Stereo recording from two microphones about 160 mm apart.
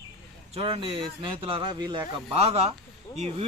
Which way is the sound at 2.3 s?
40° right (ahead or behind).